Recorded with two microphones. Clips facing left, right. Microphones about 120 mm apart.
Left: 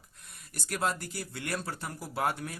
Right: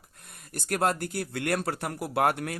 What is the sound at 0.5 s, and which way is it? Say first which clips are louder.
Speech: right 5 dB; 55° right (ahead or behind).